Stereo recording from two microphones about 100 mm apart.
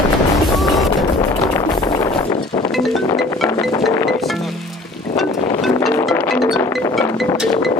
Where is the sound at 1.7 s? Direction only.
40° left (ahead or behind).